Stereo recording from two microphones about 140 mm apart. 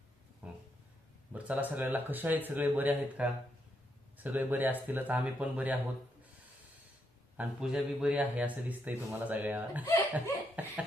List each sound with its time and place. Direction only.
0.4 s a sound: 10° right (ahead or behind)
1.3 s a man's voice: 10° right (ahead or behind)
7.3 s a man's voice: 5° right (ahead or behind)
9.8 s speech: 25° left (ahead or behind)
10.5 s a man's voice: 10° right (ahead or behind)